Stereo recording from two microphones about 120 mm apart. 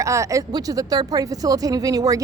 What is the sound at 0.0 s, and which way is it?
Speech, 25° right (ahead or behind).